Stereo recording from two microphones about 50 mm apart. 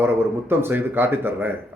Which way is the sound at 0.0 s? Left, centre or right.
Right.